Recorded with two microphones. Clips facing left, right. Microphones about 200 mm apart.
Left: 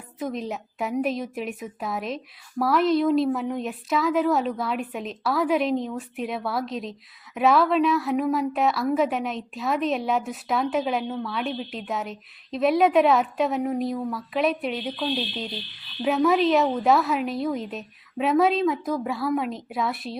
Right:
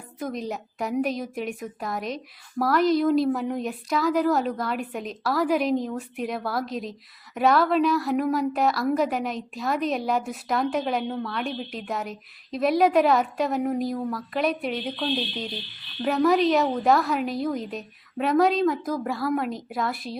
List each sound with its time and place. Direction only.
0.2 s a woman's voice: centre (ahead or behind)